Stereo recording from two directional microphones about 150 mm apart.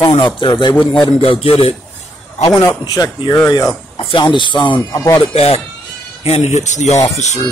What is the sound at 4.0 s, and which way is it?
Speech, 35° left (ahead or behind).